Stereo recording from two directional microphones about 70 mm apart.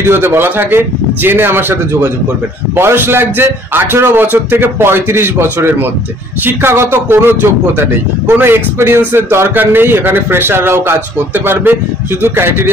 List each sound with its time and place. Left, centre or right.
0.0 s a man's voice: right